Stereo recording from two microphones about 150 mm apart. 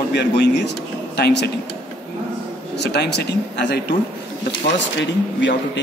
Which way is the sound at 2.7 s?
90° left.